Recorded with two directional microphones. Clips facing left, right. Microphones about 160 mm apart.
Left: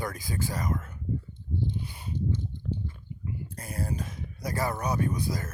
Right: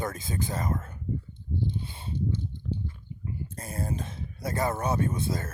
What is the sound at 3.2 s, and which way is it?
Speech, 25° right (ahead or behind).